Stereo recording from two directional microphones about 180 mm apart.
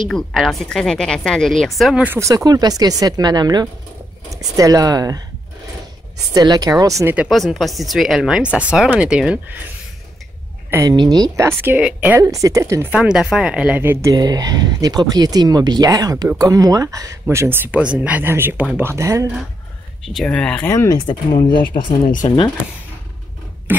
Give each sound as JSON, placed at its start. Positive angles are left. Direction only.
{"t": 0.1, "sound": "a woman's voice", "side_deg": 0}
{"t": 2.1, "sound": "speech", "side_deg": -20}
{"t": 6.3, "sound": "speech", "side_deg": -20}
{"t": 7.2, "sound": "a woman's voice", "side_deg": 0}
{"t": 10.7, "sound": "speech", "side_deg": -20}
{"t": 12.9, "sound": "speech", "side_deg": -5}
{"t": 20.1, "sound": "speech", "side_deg": 5}
{"t": 22.0, "sound": "speech", "side_deg": 45}
{"t": 23.7, "sound": "speech", "side_deg": -10}